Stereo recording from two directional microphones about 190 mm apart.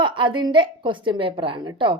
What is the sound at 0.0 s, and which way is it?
A woman's voice, 25° right (ahead or behind).